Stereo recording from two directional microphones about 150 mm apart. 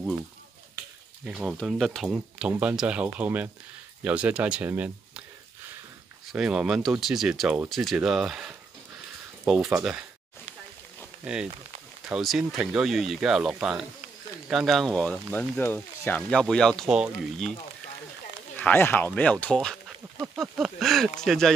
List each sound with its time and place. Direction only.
1.2 s speech: 5° right (ahead or behind)
6.3 s speech: 5° right (ahead or behind)
11.3 s speech: 5° right (ahead or behind)
18.6 s speech: 10° left (ahead or behind)